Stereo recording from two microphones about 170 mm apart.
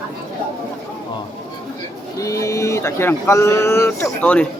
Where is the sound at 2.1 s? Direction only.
20° left (ahead or behind).